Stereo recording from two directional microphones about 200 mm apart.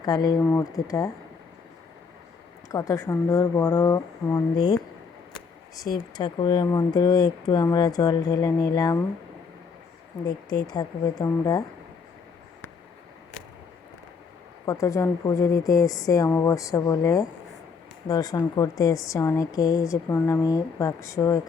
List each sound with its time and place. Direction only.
0.0 s a woman's voice: 20° left (ahead or behind)
2.6 s a woman's voice: 15° left (ahead or behind)
6.1 s speech: 20° left (ahead or behind)
10.2 s speech: 20° left (ahead or behind)
14.7 s a woman's voice: 15° left (ahead or behind)